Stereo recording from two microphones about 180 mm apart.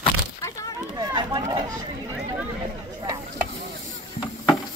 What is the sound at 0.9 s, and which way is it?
Chatter, 25° right (ahead or behind).